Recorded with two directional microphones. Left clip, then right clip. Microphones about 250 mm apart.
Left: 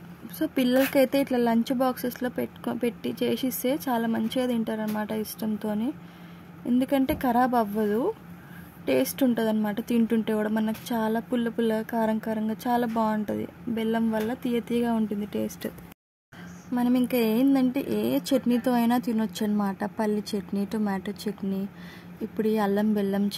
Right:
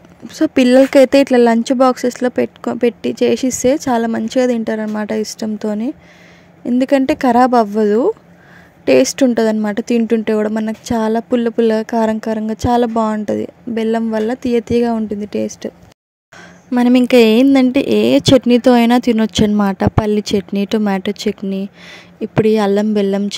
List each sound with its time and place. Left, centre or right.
0.3 s speech: right
16.7 s speech: right